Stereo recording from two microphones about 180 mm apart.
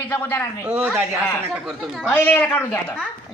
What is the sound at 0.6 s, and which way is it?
A woman's voice, 10° right (ahead or behind).